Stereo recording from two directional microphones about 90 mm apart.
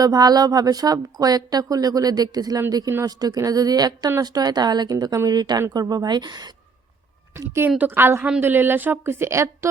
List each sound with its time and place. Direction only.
0.0 s a woman's voice: 45° right (ahead or behind)
7.3 s a woman's voice: 30° right (ahead or behind)